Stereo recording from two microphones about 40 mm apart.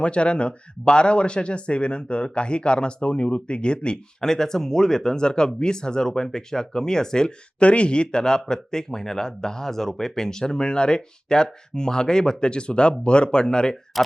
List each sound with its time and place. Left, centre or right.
0.0 s speech: left
7.6 s speech: left
14.0 s speech: centre